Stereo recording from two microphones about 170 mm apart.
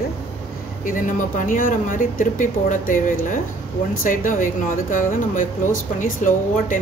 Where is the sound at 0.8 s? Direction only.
50° left (ahead or behind).